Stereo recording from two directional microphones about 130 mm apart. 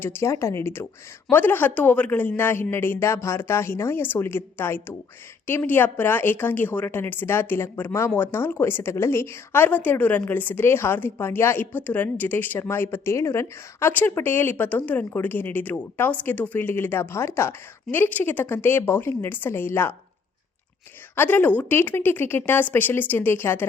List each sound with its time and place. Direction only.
0.0 s a woman's voice: 20° left (ahead or behind)
21.2 s a woman's voice: 15° left (ahead or behind)